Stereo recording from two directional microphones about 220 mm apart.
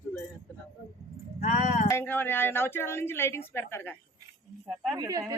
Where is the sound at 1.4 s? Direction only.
30° left (ahead or behind).